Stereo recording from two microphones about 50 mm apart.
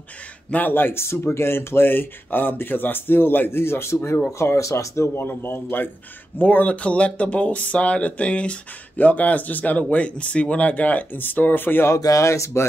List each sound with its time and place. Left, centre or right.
0.5 s speech: left
1.3 s speech: left
4.4 s speech: left
5.2 s speech: left
11.9 s speech: left